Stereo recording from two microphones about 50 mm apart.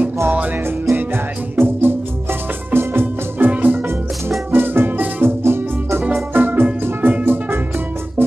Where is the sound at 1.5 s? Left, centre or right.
Right.